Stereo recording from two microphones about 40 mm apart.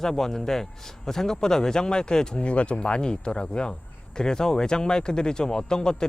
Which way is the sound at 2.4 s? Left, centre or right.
Left.